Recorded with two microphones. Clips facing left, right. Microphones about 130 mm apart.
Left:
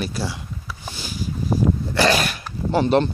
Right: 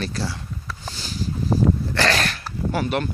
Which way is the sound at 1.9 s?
15° left (ahead or behind).